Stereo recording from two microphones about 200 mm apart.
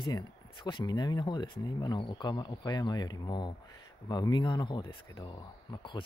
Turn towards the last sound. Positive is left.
turn(degrees=25)  # may be behind; listen again after turning